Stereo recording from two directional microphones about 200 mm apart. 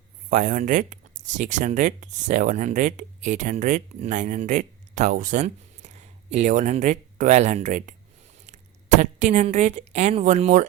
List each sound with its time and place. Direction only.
0.3 s a woman's voice: 40° right (ahead or behind)